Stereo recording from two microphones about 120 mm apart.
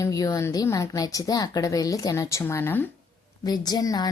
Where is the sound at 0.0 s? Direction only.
30° left (ahead or behind).